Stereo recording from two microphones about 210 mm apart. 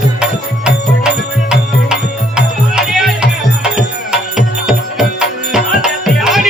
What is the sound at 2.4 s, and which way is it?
Music, centre (ahead or behind).